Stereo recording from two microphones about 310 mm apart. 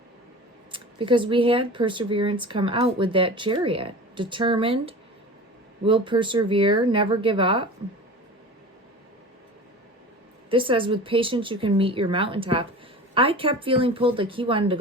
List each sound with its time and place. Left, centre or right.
0.7 s speech: centre
10.5 s speech: centre